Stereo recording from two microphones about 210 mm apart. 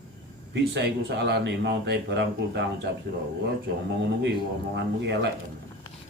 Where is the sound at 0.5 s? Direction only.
55° right (ahead or behind).